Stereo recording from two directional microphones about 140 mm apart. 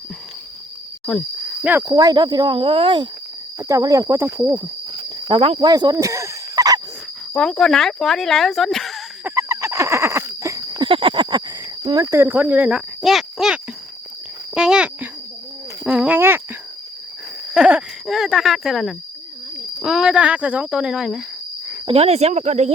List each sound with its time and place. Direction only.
1.0 s cricket: centre (ahead or behind)
1.8 s speech: 25° right (ahead or behind)
3.6 s speech: 25° right (ahead or behind)
5.0 s cricket: 35° right (ahead or behind)
5.5 s snake: 30° right (ahead or behind)
7.3 s speech: 5° left (ahead or behind)
9.2 s a sound: 20° right (ahead or behind); by 13.6 s 5° right (ahead or behind)
14.5 s cricket: 5° right (ahead or behind)
15.8 s a sound: 5° right (ahead or behind)
17.5 s speech: 10° right (ahead or behind)
21.8 s speech: 45° right (ahead or behind)